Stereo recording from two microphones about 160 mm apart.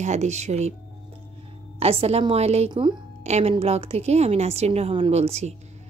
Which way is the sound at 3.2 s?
45° right (ahead or behind).